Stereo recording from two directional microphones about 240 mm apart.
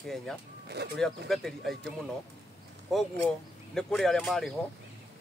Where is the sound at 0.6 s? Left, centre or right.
Right.